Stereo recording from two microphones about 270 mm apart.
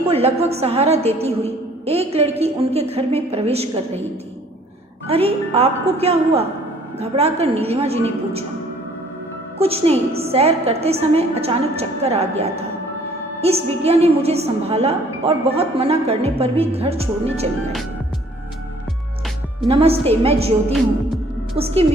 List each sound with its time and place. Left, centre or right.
0.1 s a woman's voice: right
5.0 s a woman's voice: right
9.6 s a woman's voice: right
13.8 s a woman's voice: right
19.6 s a woman's voice: right